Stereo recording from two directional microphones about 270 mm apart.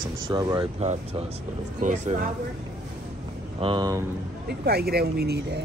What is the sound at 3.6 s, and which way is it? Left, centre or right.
Speech, centre.